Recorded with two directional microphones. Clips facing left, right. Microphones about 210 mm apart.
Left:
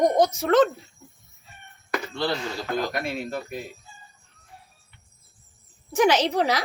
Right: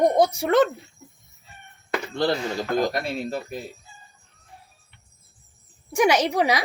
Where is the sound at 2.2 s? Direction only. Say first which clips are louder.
Right 5 dB; 45° right (ahead or behind).